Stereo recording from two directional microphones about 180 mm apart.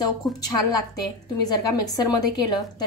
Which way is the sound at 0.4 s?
20° left (ahead or behind).